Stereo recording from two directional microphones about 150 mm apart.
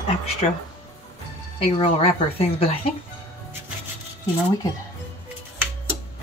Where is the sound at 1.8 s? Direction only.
40° left (ahead or behind).